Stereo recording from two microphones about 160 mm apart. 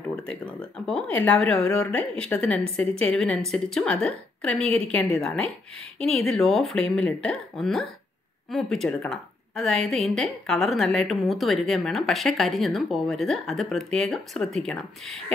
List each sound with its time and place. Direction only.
0.1 s a woman's voice: 5° left (ahead or behind)